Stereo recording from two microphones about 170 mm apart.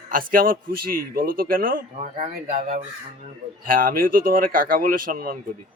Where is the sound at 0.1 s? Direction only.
55° right (ahead or behind).